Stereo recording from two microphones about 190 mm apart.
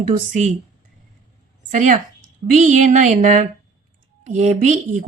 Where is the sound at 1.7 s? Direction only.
40° right (ahead or behind).